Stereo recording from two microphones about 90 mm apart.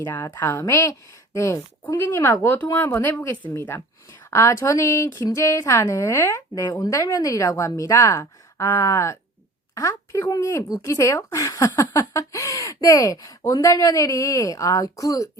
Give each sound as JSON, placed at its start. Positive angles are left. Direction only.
{"t": 0.0, "sound": "speech", "side_deg": 20}
{"t": 2.0, "sound": "a woman's voice", "side_deg": 25}